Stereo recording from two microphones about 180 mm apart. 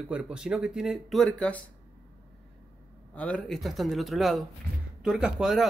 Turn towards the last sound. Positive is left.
turn(degrees=-5)  # may be behind; listen again after turning